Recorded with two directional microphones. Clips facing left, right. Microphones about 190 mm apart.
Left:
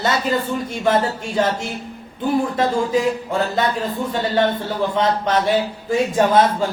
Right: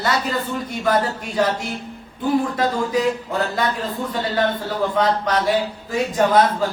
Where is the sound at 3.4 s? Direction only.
25° left (ahead or behind).